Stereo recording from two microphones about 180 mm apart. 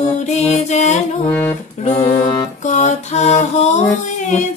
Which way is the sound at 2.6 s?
40° left (ahead or behind).